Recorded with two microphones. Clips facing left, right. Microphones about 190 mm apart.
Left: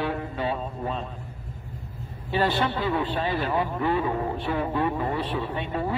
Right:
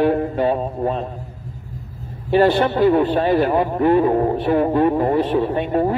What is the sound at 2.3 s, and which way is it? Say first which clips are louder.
A man's voice: right 10 dB; 45° right (ahead or behind).